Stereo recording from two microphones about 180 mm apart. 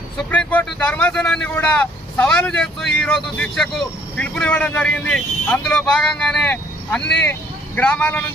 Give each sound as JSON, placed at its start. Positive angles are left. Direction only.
{"t": 0.3, "sound": "speech", "side_deg": 5}
{"t": 7.0, "sound": "speech", "side_deg": 70}
{"t": 7.8, "sound": "speech", "side_deg": 5}